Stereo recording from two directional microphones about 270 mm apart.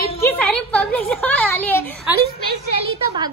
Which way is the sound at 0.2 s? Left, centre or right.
Centre.